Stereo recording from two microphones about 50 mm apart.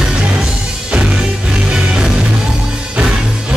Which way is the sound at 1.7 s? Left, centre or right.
Right.